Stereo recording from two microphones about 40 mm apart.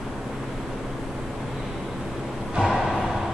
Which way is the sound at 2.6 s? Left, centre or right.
Centre.